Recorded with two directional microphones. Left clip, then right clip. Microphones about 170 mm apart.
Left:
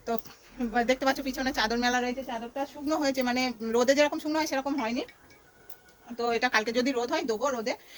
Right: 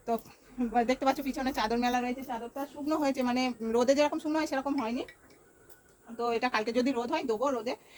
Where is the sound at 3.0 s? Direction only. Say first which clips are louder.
Left 2 dB; centre (ahead or behind).